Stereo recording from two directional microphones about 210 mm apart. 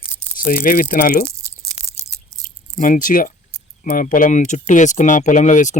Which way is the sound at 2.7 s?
40° left (ahead or behind).